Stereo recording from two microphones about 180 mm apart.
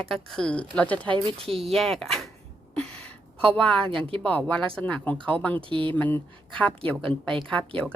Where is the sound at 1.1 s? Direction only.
30° right (ahead or behind).